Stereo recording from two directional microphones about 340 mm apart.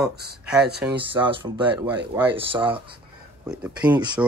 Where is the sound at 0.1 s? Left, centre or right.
Right.